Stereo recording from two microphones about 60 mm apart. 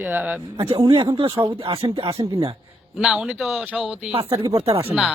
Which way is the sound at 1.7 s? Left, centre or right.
Right.